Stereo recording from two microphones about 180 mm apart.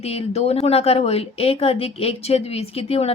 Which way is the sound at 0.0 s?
35° left (ahead or behind).